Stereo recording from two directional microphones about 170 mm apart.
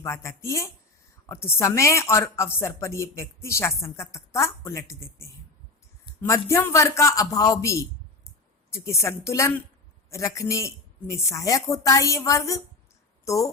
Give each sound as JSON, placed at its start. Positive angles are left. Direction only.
{"t": 0.0, "sound": "a woman's voice", "side_deg": 15}